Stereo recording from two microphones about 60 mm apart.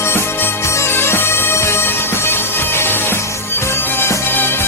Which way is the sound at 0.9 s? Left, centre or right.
Left.